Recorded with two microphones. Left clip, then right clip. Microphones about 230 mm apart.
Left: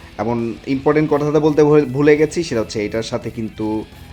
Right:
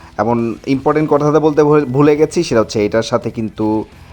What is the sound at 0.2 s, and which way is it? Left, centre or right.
Speech, centre.